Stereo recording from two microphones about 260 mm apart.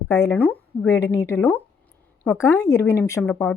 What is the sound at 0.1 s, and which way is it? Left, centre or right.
A woman's voice, centre.